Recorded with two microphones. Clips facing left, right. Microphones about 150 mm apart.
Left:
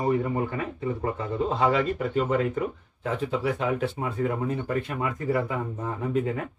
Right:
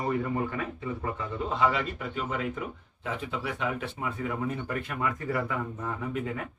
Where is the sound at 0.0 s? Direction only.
20° left (ahead or behind).